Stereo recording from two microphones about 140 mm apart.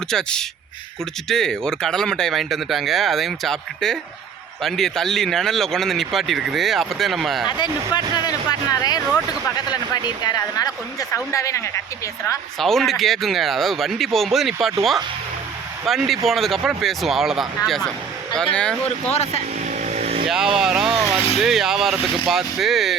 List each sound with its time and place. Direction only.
0.1 s speech: 5° left (ahead or behind)
7.4 s speech: 30° left (ahead or behind)
12.5 s speech: centre (ahead or behind)
19.1 s speech: 50° left (ahead or behind)
19.8 s vehicle: 55° right (ahead or behind)
20.2 s speech: 5° right (ahead or behind)